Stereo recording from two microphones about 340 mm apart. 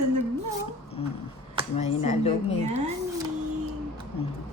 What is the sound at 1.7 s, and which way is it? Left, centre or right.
Speech, centre.